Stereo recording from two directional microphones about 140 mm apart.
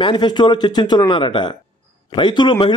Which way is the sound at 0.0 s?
35° left (ahead or behind).